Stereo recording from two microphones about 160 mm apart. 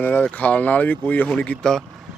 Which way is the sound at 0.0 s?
10° left (ahead or behind).